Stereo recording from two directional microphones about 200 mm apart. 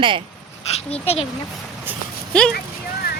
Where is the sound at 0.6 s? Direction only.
30° left (ahead or behind).